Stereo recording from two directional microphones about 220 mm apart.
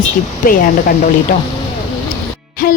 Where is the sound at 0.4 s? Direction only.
40° left (ahead or behind).